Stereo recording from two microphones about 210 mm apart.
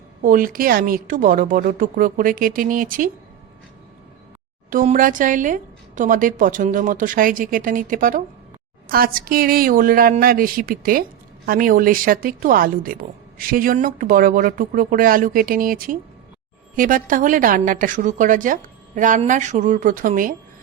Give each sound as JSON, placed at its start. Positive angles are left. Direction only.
{"t": 0.2, "sound": "a woman's voice", "side_deg": -40}
{"t": 4.7, "sound": "a woman's voice", "side_deg": -40}